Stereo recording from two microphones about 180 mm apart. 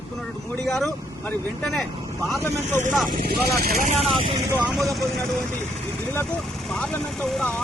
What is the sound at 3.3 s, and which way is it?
Speech, 60° right (ahead or behind).